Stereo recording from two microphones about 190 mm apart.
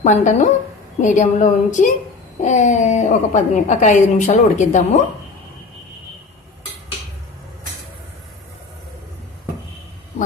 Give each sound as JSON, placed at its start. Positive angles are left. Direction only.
{"t": 0.0, "sound": "a woman's voice", "side_deg": 40}